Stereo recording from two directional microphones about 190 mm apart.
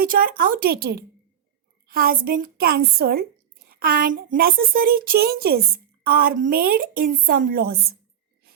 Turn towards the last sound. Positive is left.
turn(degrees=-55)  # may be behind; listen again after turning